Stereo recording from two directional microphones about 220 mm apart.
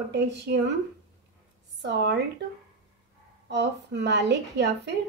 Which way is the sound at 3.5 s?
50° right (ahead or behind).